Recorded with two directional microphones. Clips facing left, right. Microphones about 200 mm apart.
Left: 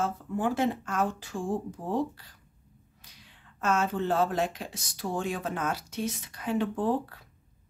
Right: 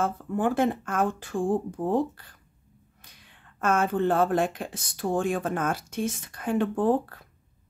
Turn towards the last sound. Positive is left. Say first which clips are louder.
# right 4 dB
turn(degrees=-50)  # may be behind; listen again after turning